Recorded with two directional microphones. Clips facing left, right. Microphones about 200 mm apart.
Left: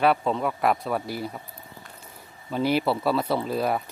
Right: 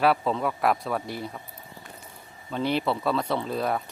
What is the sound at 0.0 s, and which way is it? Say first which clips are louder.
Speech: left 1 dB; centre (ahead or behind).